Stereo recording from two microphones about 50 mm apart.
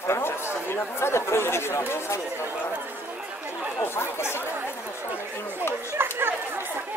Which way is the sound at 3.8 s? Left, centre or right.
Left.